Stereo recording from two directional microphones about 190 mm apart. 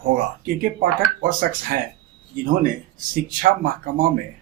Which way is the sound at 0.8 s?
45° right (ahead or behind).